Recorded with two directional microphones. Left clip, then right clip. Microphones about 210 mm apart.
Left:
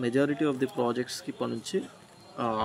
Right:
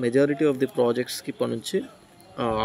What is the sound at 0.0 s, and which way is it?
A man's voice, 15° right (ahead or behind).